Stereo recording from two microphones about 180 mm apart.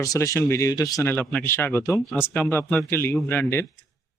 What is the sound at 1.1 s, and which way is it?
Speech, 5° left (ahead or behind).